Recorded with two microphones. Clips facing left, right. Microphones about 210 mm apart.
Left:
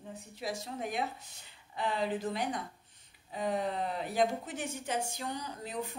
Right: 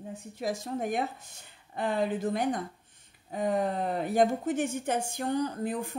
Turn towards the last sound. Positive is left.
turn(degrees=-50)  # may be behind; listen again after turning